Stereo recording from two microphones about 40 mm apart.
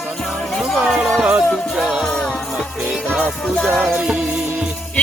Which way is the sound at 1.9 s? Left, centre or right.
Centre.